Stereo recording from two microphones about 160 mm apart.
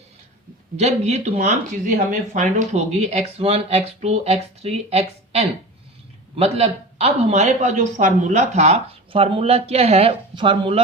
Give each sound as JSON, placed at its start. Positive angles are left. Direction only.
{"t": 0.8, "sound": "speech", "side_deg": -45}
{"t": 1.4, "sound": "speech", "side_deg": -55}